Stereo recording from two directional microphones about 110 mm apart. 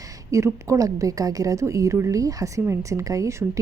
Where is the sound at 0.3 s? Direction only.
30° right (ahead or behind).